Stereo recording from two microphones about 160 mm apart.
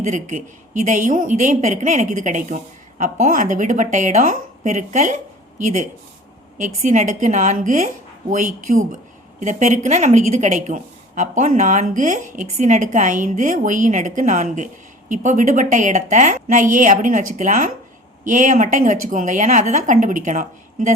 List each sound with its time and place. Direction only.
0.0 s a woman's voice: 50° right (ahead or behind)